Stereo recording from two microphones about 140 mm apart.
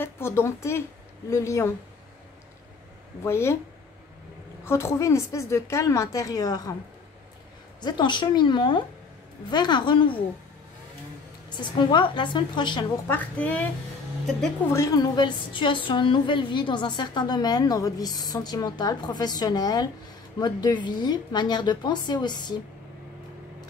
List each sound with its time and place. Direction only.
0.0 s a woman's voice: 20° left (ahead or behind)
3.3 s a woman's voice: 20° left (ahead or behind)
4.6 s a woman's voice: 20° left (ahead or behind)
7.8 s a woman's voice: 35° left (ahead or behind)
11.5 s a woman's voice: 35° left (ahead or behind)
13.0 s a woman's voice: 15° left (ahead or behind)
14.7 s a woman's voice: 20° left (ahead or behind)